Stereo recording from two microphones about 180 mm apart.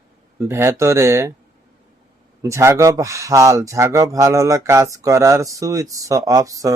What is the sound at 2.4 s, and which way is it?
Speech, 15° right (ahead or behind).